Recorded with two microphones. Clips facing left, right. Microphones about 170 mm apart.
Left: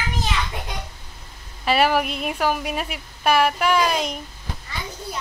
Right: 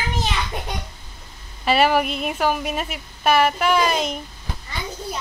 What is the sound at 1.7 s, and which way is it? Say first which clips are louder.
A woman's voice: right 1 dB; centre (ahead or behind).